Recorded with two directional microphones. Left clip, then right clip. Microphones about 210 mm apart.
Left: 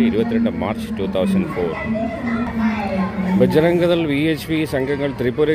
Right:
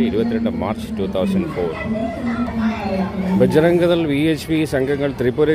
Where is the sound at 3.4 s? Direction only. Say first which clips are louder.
Right 1 dB; 10° right (ahead or behind).